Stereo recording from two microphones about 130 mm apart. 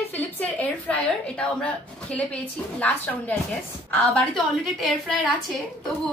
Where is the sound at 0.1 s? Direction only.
10° left (ahead or behind).